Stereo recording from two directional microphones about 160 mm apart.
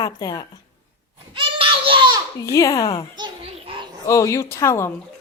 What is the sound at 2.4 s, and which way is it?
Speech, 20° left (ahead or behind).